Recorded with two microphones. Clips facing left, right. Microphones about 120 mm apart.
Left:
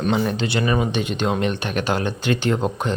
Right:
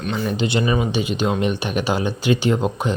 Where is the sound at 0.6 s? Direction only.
5° right (ahead or behind).